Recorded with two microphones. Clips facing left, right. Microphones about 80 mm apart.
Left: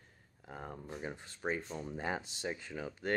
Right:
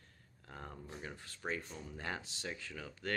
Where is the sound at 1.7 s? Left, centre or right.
Left.